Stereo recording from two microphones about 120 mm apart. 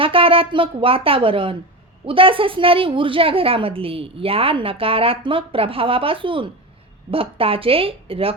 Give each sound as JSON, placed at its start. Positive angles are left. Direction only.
{"t": 0.0, "sound": "a woman's voice", "side_deg": -50}